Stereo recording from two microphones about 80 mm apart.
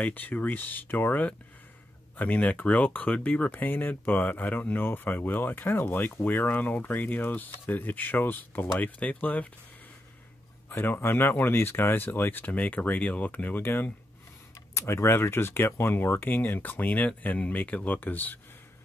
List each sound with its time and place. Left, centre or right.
0.0 s speech: left
10.7 s speech: left